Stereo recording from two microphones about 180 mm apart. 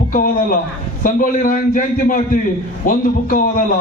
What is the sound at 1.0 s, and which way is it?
A man's voice, 50° left (ahead or behind).